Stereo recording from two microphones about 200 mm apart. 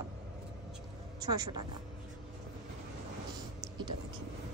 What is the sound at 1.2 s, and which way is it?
Speech, 20° right (ahead or behind).